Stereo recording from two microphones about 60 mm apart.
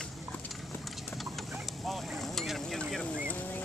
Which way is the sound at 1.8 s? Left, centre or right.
Centre.